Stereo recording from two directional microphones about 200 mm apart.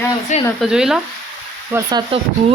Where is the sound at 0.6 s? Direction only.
Centre (ahead or behind).